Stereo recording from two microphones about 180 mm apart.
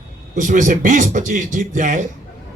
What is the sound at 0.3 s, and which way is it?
Speech, 45° right (ahead or behind).